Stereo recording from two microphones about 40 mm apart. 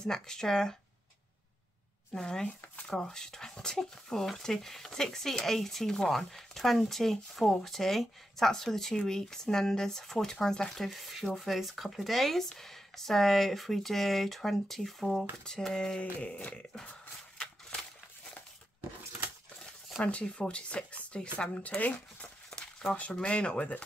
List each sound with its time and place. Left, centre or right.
0.0 s speech: centre
2.1 s speech: centre
10.9 s speech: centre
15.4 s speech: centre
16.0 s a sound: left
20.0 s speech: left
21.5 s a sound: left
22.2 s crumpling: centre
23.2 s speech: left